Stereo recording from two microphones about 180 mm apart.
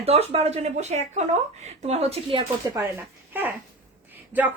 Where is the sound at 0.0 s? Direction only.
35° right (ahead or behind).